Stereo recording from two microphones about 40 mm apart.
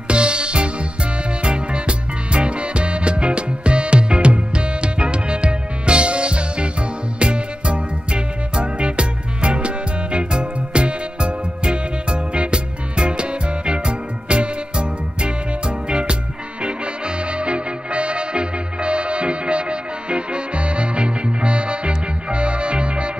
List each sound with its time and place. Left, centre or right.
0.1 s music: right